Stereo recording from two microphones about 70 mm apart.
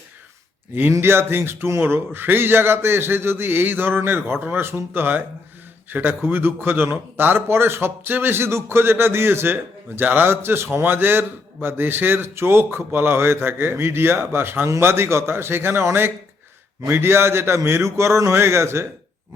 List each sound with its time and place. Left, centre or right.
0.7 s a man's voice: right